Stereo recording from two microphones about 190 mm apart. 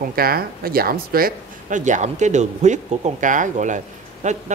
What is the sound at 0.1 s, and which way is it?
Speech, 50° right (ahead or behind).